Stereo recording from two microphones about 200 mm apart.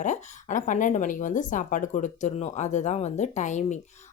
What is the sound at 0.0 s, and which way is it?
Speech, 40° left (ahead or behind).